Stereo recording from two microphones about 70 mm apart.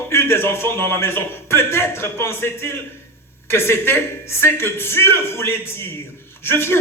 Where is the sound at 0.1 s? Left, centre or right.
Left.